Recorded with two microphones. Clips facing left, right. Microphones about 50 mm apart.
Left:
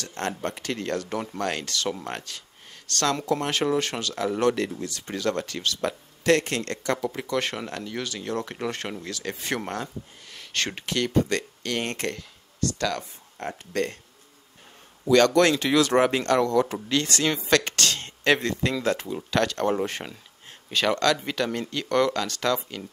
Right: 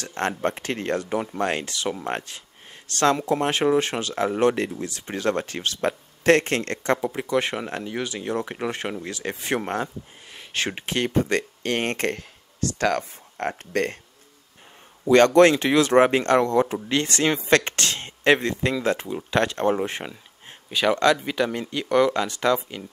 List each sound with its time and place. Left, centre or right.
0.0 s speech: right
1.0 s speech: centre
2.1 s speech: right
7.1 s speech: centre; by 13.9 s right
15.0 s speech: right